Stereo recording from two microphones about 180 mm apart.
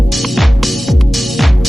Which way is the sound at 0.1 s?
Centre (ahead or behind).